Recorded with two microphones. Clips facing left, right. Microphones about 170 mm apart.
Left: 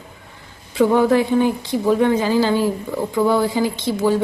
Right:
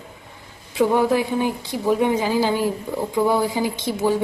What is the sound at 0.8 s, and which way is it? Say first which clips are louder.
Speech: left 3 dB; 10° right (ahead or behind).